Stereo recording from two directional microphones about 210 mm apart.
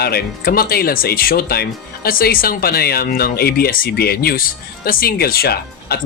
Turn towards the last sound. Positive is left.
turn(degrees=45)  # may be behind; listen again after turning